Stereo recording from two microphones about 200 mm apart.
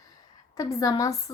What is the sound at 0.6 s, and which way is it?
Speech, 15° left (ahead or behind).